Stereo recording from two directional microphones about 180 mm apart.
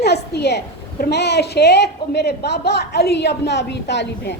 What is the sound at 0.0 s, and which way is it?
A woman's voice, 65° left (ahead or behind).